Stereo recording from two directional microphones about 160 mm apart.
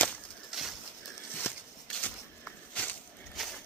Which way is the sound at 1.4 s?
10° left (ahead or behind).